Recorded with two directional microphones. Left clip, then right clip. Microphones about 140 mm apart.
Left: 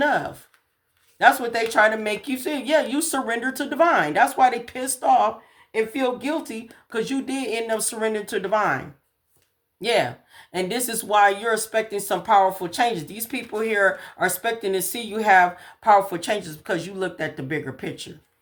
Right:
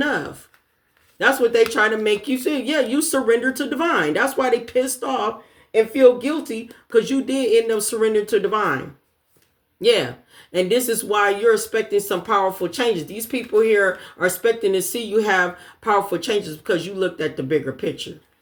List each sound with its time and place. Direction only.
0.0 s speech: 40° left (ahead or behind)
9.8 s speech: 40° left (ahead or behind)